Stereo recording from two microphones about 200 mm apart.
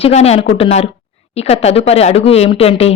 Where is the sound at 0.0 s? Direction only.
30° left (ahead or behind).